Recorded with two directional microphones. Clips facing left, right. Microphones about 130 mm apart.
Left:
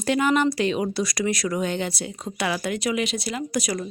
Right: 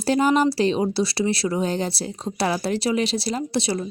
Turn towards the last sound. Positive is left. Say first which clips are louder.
# right 2 dB
turn(degrees=-30)  # may be behind; listen again after turning